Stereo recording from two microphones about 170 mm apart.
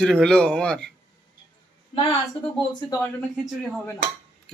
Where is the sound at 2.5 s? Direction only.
25° left (ahead or behind).